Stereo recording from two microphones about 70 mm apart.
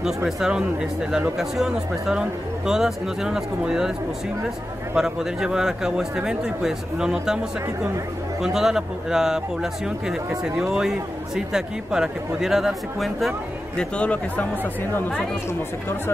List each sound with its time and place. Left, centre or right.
0.0 s speech: centre
4.9 s speech: centre
8.4 s speech: centre
13.7 s speech: centre